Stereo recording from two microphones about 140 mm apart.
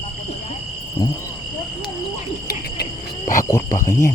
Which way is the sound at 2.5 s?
90° left.